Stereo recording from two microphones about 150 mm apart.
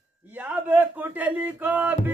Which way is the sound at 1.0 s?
10° right (ahead or behind).